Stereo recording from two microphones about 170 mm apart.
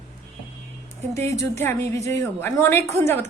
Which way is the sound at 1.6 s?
15° left (ahead or behind).